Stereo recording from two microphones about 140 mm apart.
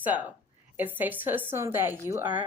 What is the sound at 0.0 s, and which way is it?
A woman's voice, 10° right (ahead or behind).